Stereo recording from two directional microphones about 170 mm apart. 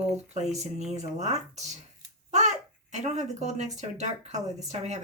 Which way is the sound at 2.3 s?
45° right (ahead or behind).